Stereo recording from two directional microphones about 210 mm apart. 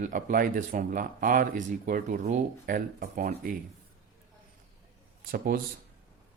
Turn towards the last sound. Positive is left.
turn(degrees=-45)  # may be behind; listen again after turning